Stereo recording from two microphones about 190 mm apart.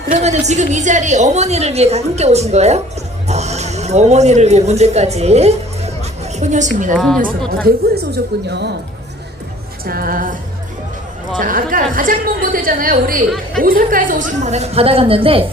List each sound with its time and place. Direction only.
0.1 s a woman's voice: 35° right (ahead or behind)
6.9 s a woman's voice: 5° left (ahead or behind)
7.2 s a woman's voice: 50° right (ahead or behind)
8.3 s a woman's voice: 60° right (ahead or behind)
9.8 s a woman's voice: 50° right (ahead or behind)
11.3 s a woman's voice: 45° right (ahead or behind); by 15.4 s 30° right (ahead or behind)